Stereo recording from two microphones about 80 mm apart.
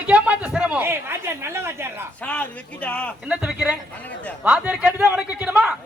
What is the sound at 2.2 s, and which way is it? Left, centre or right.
Speech, centre.